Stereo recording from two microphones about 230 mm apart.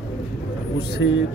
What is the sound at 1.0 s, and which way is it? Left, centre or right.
Speech, left.